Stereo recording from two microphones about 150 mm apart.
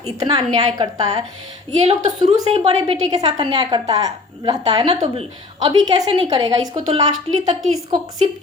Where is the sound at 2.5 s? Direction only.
40° right (ahead or behind).